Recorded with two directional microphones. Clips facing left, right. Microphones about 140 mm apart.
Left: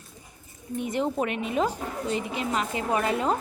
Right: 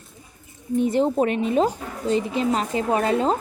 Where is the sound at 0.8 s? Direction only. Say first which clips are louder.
Right 7 dB; 30° right (ahead or behind).